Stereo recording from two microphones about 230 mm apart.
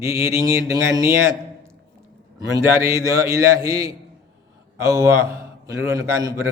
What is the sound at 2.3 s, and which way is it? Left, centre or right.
A man's voice, centre.